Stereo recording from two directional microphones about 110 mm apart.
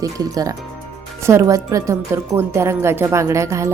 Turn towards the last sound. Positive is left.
turn(degrees=-30)  # may be behind; listen again after turning